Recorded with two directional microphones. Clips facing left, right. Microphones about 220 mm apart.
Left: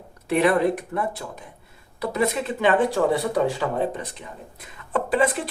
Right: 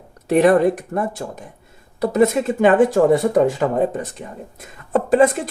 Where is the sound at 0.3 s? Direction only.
45° right (ahead or behind).